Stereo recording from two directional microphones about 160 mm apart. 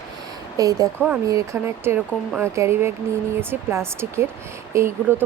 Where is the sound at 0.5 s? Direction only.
20° right (ahead or behind).